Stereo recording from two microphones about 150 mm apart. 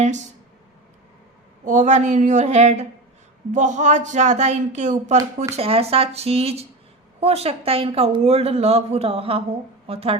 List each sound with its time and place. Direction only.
1.6 s speech: 55° right (ahead or behind)
5.5 s a woman's voice: 40° right (ahead or behind)